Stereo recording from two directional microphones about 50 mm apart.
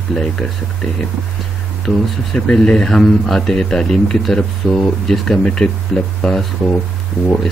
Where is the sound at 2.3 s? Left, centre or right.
Left.